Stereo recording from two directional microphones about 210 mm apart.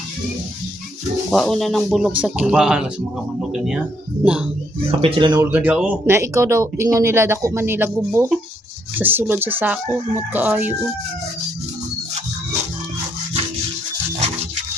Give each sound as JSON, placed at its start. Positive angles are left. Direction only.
{"t": 1.3, "sound": "speech", "side_deg": 0}
{"t": 4.9, "sound": "speech", "side_deg": -25}
{"t": 5.5, "sound": "speech", "side_deg": -5}